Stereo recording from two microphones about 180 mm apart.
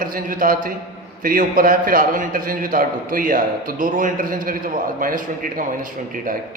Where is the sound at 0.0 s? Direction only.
50° right (ahead or behind).